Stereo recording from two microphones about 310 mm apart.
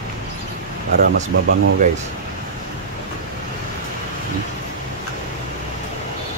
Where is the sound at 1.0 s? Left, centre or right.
Right.